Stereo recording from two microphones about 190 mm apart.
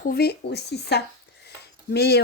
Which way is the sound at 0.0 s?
55° left (ahead or behind).